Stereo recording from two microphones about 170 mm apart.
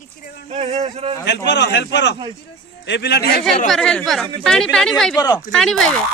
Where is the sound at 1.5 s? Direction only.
90° left; by 3.3 s 70° left (ahead or behind).